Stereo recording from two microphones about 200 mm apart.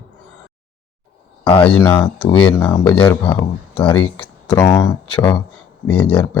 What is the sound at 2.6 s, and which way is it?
Speech, 10° left (ahead or behind).